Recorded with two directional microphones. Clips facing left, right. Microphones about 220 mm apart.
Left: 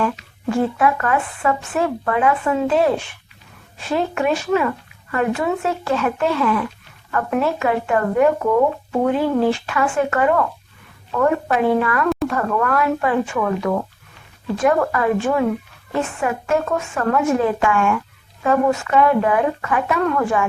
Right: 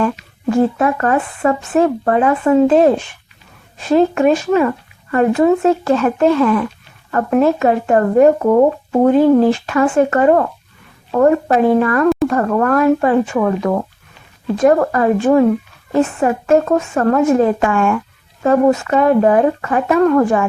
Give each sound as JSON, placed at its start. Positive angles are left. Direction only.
{"t": 0.8, "sound": "speech", "side_deg": -40}
{"t": 3.9, "sound": "speech", "side_deg": -40}